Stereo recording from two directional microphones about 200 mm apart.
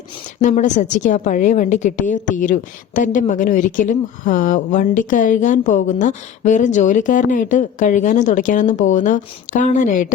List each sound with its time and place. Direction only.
0.4 s a woman's voice: 35° left (ahead or behind)